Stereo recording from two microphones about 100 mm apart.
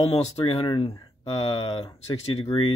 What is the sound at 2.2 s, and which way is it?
Speech, 85° left.